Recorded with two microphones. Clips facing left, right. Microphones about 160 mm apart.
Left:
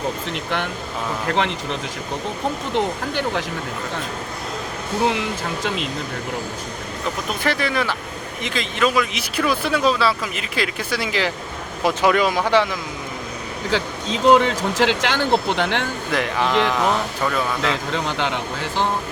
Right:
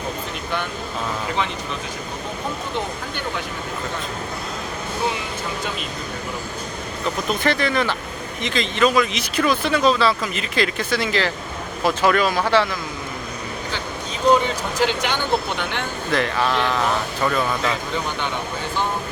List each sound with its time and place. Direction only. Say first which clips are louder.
1.3 s speech: left 4 dB; 80° left
2.7 s speech: left 5 dB; 90° left
5.6 s speech: left 4 dB; 90° left
7.3 s speech: right 2 dB; 5° left (ahead or behind)
13.7 s speech: left 10 dB; 90° left
16.1 s speech: left 1 dB; 15° left (ahead or behind)
17.7 s speech: left 1 dB; 90° left